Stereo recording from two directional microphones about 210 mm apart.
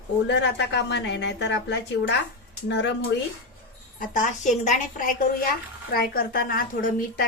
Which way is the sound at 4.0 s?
40° left (ahead or behind).